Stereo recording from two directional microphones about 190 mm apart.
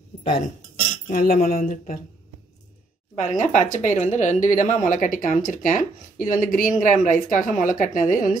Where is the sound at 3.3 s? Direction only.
40° left (ahead or behind).